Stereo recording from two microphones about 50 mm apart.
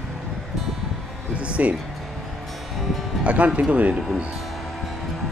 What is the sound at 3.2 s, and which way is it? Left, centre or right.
Speech, right.